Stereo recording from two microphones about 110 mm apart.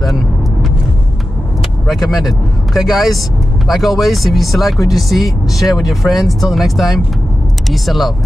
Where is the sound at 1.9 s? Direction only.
Centre (ahead or behind).